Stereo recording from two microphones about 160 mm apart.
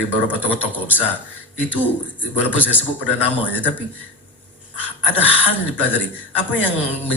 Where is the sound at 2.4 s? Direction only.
10° left (ahead or behind).